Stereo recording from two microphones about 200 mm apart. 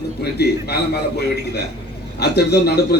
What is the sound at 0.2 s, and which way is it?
A man's voice, 55° left (ahead or behind).